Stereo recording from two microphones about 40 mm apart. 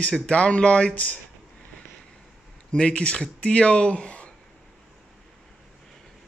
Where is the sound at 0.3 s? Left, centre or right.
Left.